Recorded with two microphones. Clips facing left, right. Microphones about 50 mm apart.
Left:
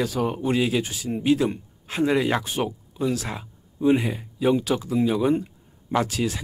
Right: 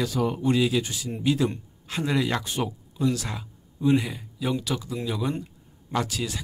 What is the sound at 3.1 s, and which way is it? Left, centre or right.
Speech, centre.